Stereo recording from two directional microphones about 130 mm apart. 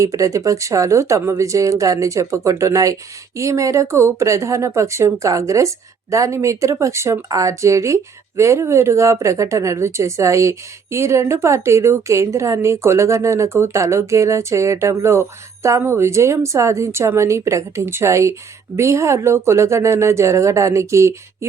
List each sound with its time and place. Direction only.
0.0 s speech: 25° right (ahead or behind)